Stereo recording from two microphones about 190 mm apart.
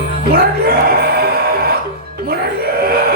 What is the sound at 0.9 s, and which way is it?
Music, 55° right (ahead or behind).